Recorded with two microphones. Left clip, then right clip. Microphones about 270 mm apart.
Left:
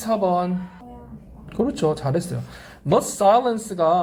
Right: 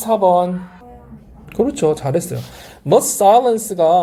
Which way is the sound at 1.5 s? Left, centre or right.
Centre.